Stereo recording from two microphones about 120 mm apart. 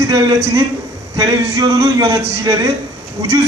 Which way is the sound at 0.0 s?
30° right (ahead or behind).